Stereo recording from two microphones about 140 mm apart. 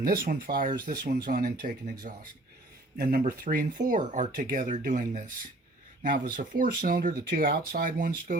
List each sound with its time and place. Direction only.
0.0 s speech: 90° right